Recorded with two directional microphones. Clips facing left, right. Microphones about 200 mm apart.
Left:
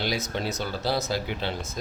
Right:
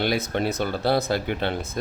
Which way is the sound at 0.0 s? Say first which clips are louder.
Right 5 dB; 55° right (ahead or behind).